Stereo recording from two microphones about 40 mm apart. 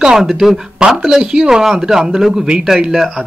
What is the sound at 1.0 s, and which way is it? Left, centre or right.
Speech, centre.